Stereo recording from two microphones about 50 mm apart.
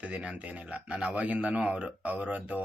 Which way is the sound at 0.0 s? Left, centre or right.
Right.